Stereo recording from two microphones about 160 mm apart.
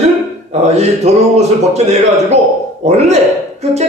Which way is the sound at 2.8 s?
45° right (ahead or behind).